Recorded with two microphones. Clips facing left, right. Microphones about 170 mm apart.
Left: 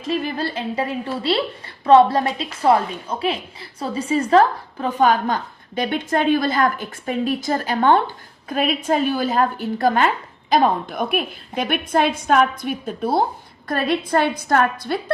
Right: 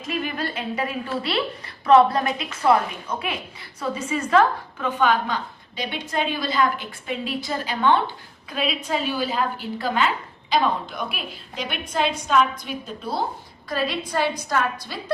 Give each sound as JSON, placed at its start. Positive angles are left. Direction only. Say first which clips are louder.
{"t": 0.0, "sound": "a woman's voice", "louder": "left 4 dB", "side_deg": 30}